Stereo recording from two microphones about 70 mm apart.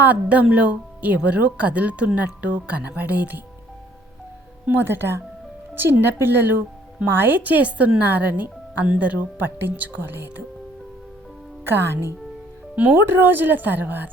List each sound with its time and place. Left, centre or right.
0.0 s speech: right
4.6 s speech: right
11.6 s speech: right